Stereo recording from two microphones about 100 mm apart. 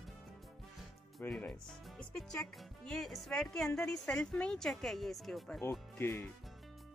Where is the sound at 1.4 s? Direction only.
10° left (ahead or behind).